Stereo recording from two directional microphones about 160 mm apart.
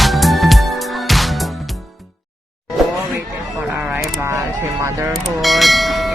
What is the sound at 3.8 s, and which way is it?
Camera, 5° right (ahead or behind).